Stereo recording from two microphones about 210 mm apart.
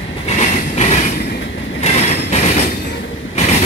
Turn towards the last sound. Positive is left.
turn(degrees=30)  # may be behind; listen again after turning